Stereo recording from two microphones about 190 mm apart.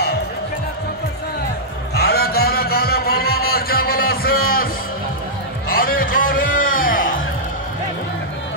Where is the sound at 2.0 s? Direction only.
55° left (ahead or behind).